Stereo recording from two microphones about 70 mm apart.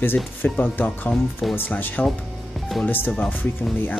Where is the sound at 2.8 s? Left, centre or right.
Left.